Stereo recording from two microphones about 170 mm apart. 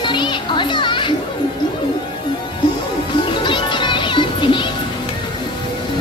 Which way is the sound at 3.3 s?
30° left (ahead or behind).